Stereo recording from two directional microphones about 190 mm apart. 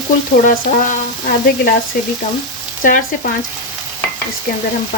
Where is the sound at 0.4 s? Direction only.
45° left (ahead or behind).